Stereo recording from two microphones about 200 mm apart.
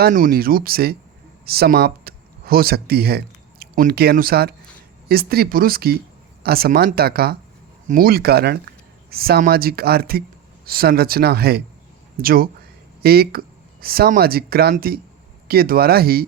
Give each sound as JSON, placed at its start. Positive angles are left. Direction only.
{"t": 0.0, "sound": "speech", "side_deg": -45}